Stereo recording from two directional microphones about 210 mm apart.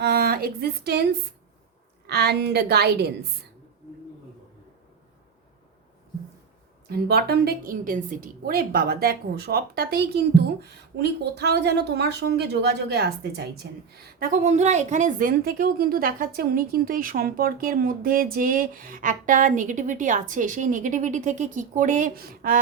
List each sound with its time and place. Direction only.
0.0 s a sound: 50° right (ahead or behind)
2.0 s a woman's voice: 50° right (ahead or behind)
6.8 s a woman's voice: 50° right (ahead or behind)